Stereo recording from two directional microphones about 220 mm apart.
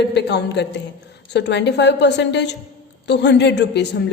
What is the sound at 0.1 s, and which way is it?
A man's voice, 50° left (ahead or behind).